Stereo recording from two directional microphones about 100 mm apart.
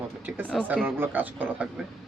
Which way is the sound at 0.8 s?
20° right (ahead or behind).